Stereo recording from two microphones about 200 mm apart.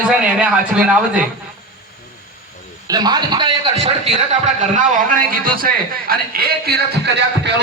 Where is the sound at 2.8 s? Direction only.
20° right (ahead or behind); by 4.9 s 35° right (ahead or behind).